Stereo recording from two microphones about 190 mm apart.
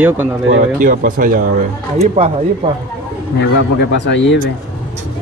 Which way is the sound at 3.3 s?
65° left (ahead or behind).